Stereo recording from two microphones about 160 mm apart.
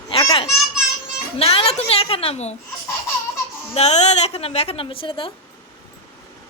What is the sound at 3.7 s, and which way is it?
A woman's voice, 45° left (ahead or behind).